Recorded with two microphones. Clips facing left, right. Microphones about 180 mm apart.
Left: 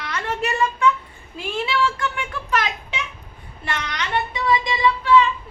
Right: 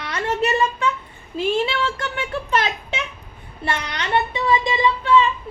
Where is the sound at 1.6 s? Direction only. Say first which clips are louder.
Even; 25° right (ahead or behind).